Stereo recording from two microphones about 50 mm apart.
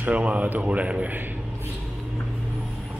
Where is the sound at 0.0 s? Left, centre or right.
Right.